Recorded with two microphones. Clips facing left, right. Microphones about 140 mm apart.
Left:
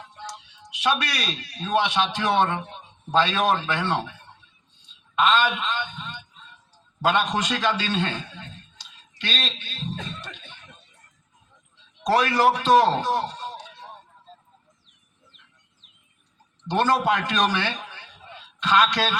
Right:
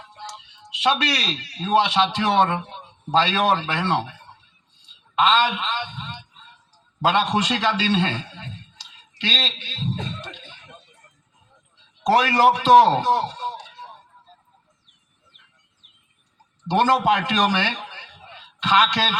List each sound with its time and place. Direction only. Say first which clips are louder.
0.3 s a man's voice: even; 25° right (ahead or behind)
5.2 s a man's voice: right 2 dB; 25° right (ahead or behind)
9.3 s a man's voice: right 2 dB; 25° right (ahead or behind)
12.0 s a man's voice: right 3 dB; 25° right (ahead or behind)
16.6 s a man's voice: right 3 dB; 25° right (ahead or behind)
18.7 s a man's voice: right 1 dB; 25° right (ahead or behind)